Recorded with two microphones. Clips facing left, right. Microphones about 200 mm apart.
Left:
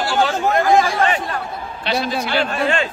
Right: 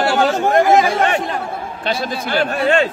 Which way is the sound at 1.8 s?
50° right (ahead or behind).